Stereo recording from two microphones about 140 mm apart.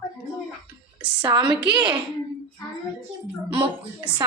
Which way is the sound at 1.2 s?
35° right (ahead or behind).